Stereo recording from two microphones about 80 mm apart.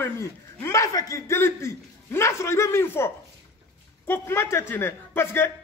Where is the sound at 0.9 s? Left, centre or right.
Left.